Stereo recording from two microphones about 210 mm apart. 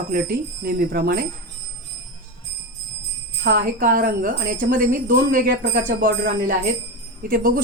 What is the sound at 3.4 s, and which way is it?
Speech, 45° right (ahead or behind).